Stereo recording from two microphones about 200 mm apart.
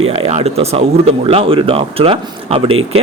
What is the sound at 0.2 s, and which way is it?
Speech, 30° right (ahead or behind).